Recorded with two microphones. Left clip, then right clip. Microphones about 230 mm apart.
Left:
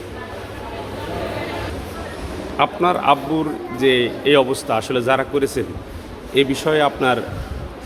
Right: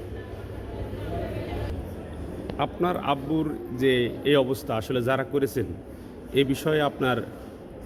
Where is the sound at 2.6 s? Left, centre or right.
Centre.